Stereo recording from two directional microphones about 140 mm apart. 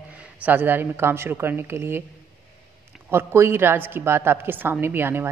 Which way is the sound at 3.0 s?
20° right (ahead or behind).